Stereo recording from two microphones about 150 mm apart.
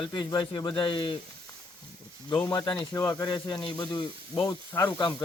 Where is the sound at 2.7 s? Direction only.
20° left (ahead or behind).